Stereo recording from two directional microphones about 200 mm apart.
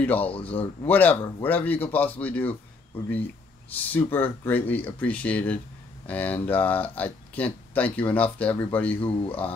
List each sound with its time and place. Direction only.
0.0 s speech: 10° left (ahead or behind)
0.3 s speech: 30° left (ahead or behind)
0.8 s speech: 10° left (ahead or behind)
3.7 s speech: 10° left (ahead or behind)